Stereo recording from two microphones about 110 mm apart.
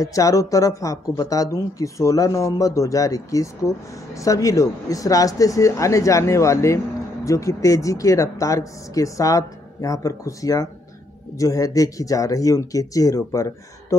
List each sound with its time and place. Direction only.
0.0 s speech: 30° left (ahead or behind)